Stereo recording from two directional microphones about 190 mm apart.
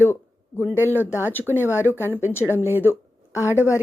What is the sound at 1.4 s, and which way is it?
A woman's voice, 10° right (ahead or behind).